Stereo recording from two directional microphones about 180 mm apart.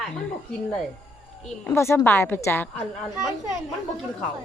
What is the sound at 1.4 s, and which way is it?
A woman's voice, 10° left (ahead or behind).